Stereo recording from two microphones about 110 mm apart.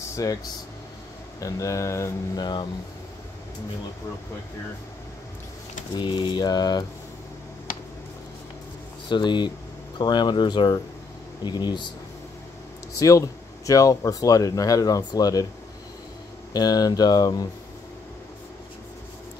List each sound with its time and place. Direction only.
0.1 s speech: 30° left (ahead or behind)
1.4 s speech: 30° left (ahead or behind)
2.3 s speech: 40° left (ahead or behind)
5.9 s speech: 45° left (ahead or behind)
9.1 s speech: 45° left (ahead or behind)
12.9 s speech: 30° left (ahead or behind)
16.5 s speech: 40° left (ahead or behind)